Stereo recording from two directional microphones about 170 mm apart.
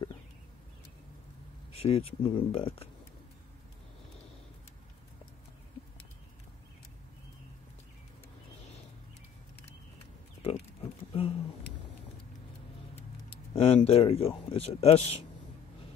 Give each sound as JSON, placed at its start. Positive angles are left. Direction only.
{"t": 1.7, "sound": "speech", "side_deg": 35}
{"t": 10.4, "sound": "wild animals", "side_deg": 35}
{"t": 12.9, "sound": "a sound", "side_deg": 35}